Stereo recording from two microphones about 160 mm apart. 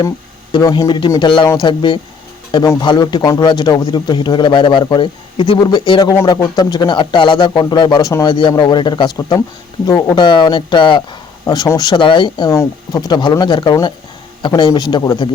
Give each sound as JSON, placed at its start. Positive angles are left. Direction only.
{"t": 0.6, "sound": "speech", "side_deg": 25}
{"t": 12.5, "sound": "speech", "side_deg": 20}